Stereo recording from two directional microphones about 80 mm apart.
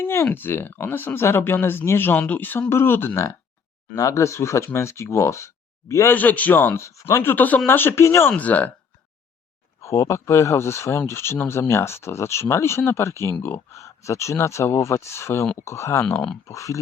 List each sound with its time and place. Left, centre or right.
0.0 s speech: left
3.9 s speech: left
6.1 s speech: centre
6.8 s speech: left
7.2 s speech: left
8.3 s speech: centre
9.8 s speech: left
13.7 s speech: left
16.0 s speech: centre
16.5 s speech: left